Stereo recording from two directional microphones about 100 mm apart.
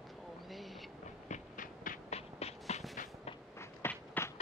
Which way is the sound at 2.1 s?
90° left.